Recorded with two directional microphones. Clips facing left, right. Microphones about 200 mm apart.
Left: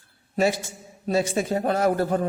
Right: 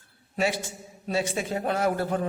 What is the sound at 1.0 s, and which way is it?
A man's voice, 40° left (ahead or behind).